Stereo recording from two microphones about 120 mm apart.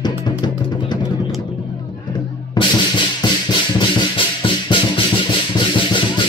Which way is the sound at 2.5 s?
40° left (ahead or behind).